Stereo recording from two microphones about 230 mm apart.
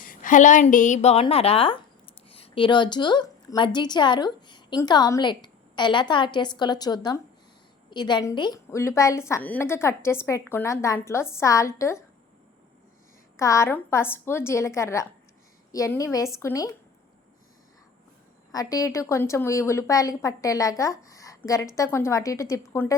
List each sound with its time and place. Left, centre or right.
0.0 s a woman's voice: left; by 12.0 s centre
13.3 s a woman's voice: centre
18.5 s a woman's voice: centre